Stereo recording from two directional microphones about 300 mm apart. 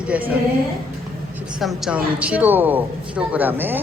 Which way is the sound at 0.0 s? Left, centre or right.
Centre.